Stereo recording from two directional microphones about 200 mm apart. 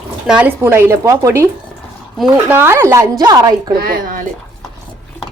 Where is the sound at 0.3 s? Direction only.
5° right (ahead or behind).